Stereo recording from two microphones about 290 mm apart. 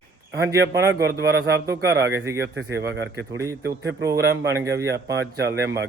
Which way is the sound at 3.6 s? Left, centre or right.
Right.